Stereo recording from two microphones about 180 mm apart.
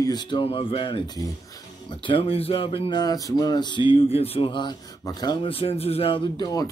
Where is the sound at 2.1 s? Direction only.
30° left (ahead or behind).